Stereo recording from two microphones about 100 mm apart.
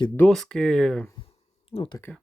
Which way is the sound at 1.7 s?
70° left (ahead or behind).